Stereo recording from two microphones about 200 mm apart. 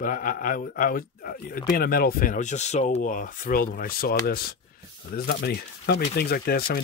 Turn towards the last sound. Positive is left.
turn(degrees=50)  # may be behind; listen again after turning